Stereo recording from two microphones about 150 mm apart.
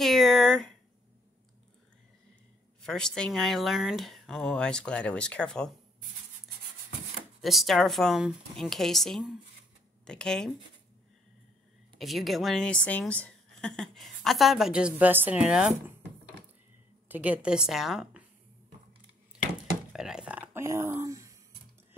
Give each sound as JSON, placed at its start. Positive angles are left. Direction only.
{"t": 0.0, "sound": "a sound", "side_deg": 0}
{"t": 2.8, "sound": "a woman's voice", "side_deg": 5}
{"t": 7.4, "sound": "a woman's voice", "side_deg": 0}
{"t": 12.0, "sound": "a woman's voice", "side_deg": 0}
{"t": 17.1, "sound": "a woman's voice", "side_deg": -10}
{"t": 19.9, "sound": "a sound", "side_deg": -5}